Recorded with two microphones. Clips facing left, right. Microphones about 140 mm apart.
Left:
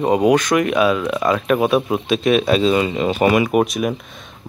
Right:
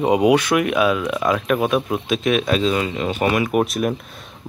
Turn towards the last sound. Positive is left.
turn(degrees=0)  # may be behind; listen again after turning